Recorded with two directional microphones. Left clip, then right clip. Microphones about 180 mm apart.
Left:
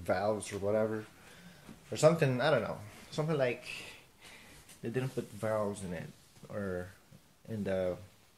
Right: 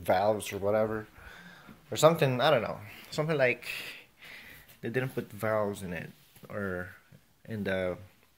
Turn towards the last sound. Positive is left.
turn(degrees=-10)  # may be behind; listen again after turning